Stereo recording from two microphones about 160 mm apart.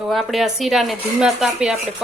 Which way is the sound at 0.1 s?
Centre (ahead or behind).